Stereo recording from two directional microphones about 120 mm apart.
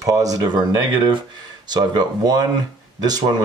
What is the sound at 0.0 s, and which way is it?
Speech, 30° right (ahead or behind).